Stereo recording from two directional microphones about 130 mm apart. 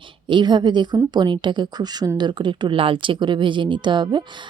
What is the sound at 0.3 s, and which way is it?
A woman's voice, 35° right (ahead or behind).